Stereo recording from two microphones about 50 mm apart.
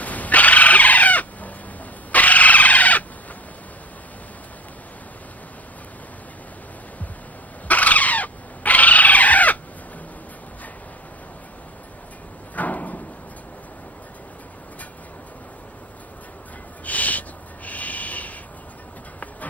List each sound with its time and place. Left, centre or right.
0.0 s chicken: left
2.1 s a sound: left
7.6 s bird: left
12.5 s slam: left
16.8 s owl: left
17.6 s a sound: left